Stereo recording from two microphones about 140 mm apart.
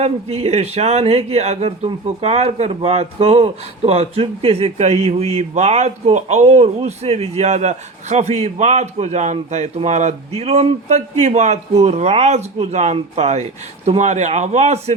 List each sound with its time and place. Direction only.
0.0 s speech: 50° right (ahead or behind)